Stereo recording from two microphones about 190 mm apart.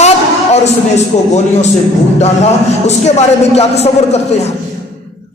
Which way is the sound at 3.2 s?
35° left (ahead or behind).